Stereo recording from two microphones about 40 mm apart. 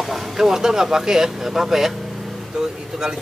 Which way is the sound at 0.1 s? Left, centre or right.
Centre.